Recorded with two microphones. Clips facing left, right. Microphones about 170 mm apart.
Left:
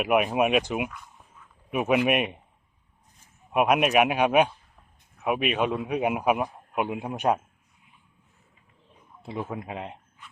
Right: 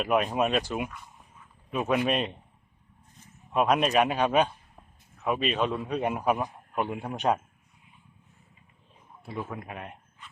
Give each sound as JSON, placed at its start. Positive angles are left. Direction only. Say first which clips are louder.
{"t": 0.0, "sound": "a man's voice", "louder": "left 3 dB", "side_deg": 10}
{"t": 3.5, "sound": "a man's voice", "louder": "left 2 dB", "side_deg": 10}
{"t": 9.2, "sound": "speech", "louder": "left 3 dB", "side_deg": 20}